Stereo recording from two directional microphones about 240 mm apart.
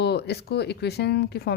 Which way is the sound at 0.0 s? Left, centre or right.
Left.